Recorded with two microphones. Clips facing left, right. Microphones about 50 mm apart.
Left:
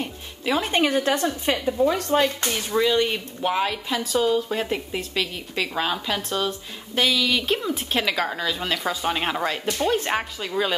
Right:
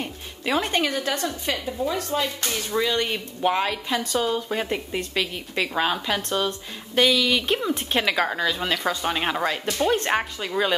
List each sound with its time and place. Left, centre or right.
0.0 s music: centre
0.7 s a woman's voice: centre
2.7 s a woman's voice: centre